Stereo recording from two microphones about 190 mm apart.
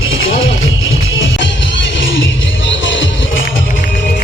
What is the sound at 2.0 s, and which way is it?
Music, 80° left.